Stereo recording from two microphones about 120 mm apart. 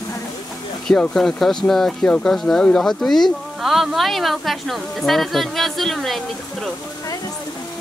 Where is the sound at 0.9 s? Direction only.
5° left (ahead or behind).